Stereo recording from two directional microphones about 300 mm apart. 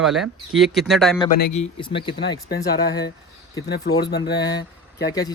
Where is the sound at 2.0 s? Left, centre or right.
Centre.